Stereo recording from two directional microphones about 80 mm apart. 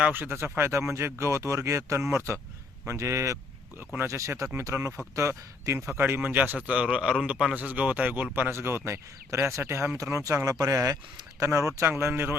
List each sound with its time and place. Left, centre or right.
0.1 s speech: right
3.8 s a man's voice: right